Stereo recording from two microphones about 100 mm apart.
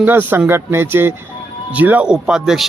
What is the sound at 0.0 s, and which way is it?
Speech, 20° right (ahead or behind).